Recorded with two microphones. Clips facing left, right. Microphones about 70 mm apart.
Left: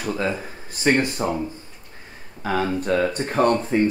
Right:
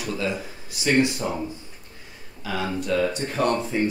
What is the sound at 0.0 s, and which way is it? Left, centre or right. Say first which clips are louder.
Speech: left 3 dB; left.